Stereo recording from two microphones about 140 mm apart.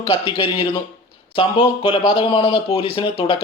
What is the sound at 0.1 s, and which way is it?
Speech, 35° left (ahead or behind).